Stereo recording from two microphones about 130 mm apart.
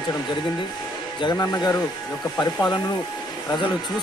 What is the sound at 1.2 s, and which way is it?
Speech, 30° left (ahead or behind).